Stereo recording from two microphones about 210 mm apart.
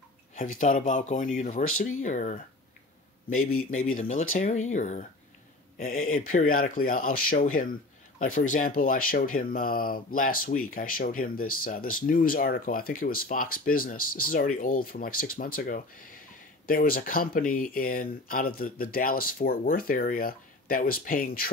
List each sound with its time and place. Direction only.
0.4 s speech: 35° left (ahead or behind)
1.6 s speech: 80° left
2.0 s speech: 35° left (ahead or behind)
3.3 s speech: 85° left
3.8 s speech: 40° left (ahead or behind)
5.9 s speech: 85° left
6.5 s speech: 40° left (ahead or behind)